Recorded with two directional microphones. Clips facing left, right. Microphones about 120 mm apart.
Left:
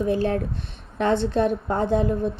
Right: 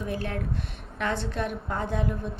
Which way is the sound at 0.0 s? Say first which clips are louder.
Left 9 dB; 30° left (ahead or behind).